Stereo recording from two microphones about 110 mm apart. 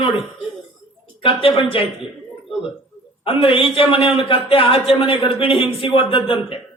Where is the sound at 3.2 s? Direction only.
55° left (ahead or behind).